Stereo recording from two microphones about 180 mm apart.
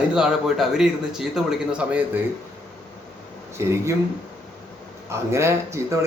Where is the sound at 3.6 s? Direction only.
15° right (ahead or behind).